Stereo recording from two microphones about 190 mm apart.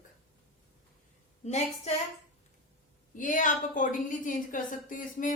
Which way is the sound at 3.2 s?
45° left (ahead or behind).